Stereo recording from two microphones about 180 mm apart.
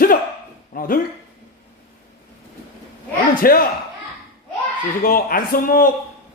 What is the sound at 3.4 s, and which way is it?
Speech, 55° left (ahead or behind).